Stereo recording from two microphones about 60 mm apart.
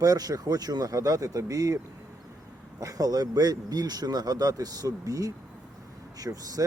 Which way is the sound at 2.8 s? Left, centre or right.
Right.